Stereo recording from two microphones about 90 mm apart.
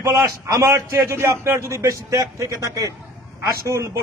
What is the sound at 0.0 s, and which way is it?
A man's voice, 35° right (ahead or behind).